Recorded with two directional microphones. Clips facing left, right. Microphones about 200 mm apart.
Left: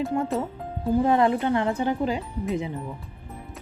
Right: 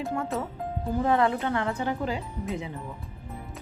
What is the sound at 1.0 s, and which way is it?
Speech, 20° left (ahead or behind).